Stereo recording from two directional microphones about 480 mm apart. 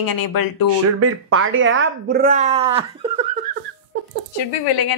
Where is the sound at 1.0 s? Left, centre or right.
Right.